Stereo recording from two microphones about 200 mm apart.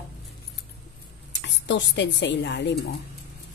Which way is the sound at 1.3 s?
60° left (ahead or behind).